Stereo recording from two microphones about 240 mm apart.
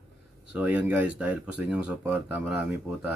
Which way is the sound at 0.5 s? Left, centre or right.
Centre.